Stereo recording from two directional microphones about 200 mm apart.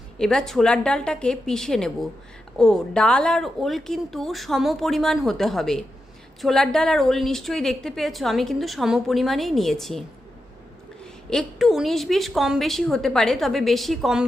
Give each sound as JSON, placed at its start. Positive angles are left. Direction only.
{"t": 0.2, "sound": "a woman's voice", "side_deg": 5}
{"t": 11.0, "sound": "a woman's voice", "side_deg": 5}